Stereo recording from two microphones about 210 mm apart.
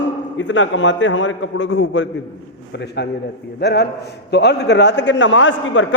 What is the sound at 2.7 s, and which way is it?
A man's voice, 55° left (ahead or behind).